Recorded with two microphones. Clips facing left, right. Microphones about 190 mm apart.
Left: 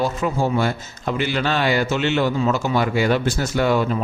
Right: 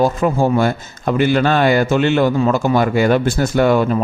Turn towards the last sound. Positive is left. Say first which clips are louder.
# right 5 dB
turn(degrees=-50)  # may be behind; listen again after turning